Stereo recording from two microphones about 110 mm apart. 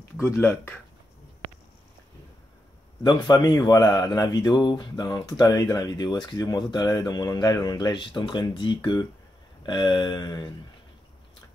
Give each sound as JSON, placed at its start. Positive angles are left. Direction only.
{"t": 0.2, "sound": "speech", "side_deg": 25}
{"t": 3.0, "sound": "speech", "side_deg": 35}